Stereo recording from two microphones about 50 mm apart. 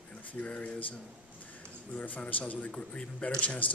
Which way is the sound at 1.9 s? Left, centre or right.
Left.